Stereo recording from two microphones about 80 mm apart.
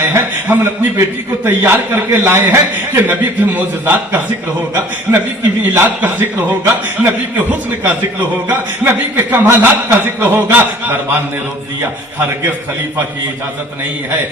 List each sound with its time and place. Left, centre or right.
0.0 s a man's voice: right
5.1 s speech: right
5.7 s a man's voice: right
8.4 s a man's voice: right